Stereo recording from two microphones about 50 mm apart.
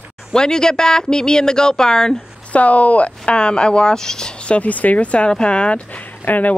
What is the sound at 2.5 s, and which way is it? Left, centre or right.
Speech, left.